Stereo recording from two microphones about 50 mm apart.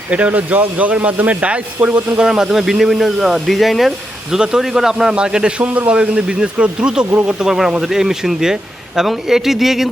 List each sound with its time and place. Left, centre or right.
0.1 s speech: right
2.1 s a man's voice: centre
7.4 s a man's voice: centre